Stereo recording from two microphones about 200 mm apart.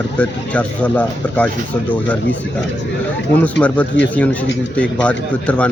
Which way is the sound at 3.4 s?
5° left (ahead or behind).